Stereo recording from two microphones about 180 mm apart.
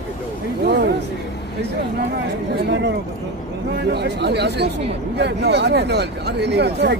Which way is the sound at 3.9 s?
65° right (ahead or behind).